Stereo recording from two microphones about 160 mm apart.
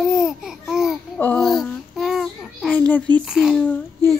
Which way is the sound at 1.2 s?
5° left (ahead or behind).